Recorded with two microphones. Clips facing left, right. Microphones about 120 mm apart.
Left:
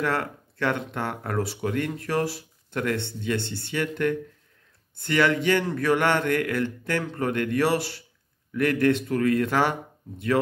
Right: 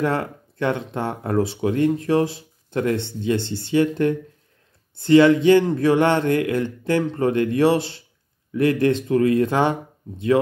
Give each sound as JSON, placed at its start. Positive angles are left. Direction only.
{"t": 0.0, "sound": "a man's voice", "side_deg": -20}
{"t": 3.4, "sound": "speech", "side_deg": 60}
{"t": 3.7, "sound": "a man's voice", "side_deg": -25}